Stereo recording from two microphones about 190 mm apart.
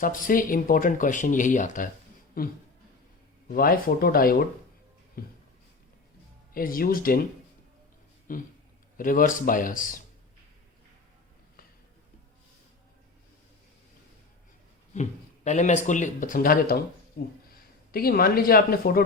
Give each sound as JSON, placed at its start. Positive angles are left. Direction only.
{"t": 0.0, "sound": "speech", "side_deg": 45}
{"t": 6.5, "sound": "speech", "side_deg": 50}
{"t": 8.3, "sound": "speech", "side_deg": 45}
{"t": 15.4, "sound": "a man's voice", "side_deg": 40}